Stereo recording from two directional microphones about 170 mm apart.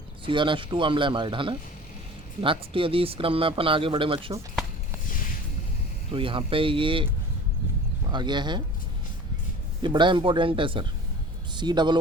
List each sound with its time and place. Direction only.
0.3 s speech: 30° right (ahead or behind)
6.1 s speech: 30° right (ahead or behind)
9.8 s speech: 30° right (ahead or behind)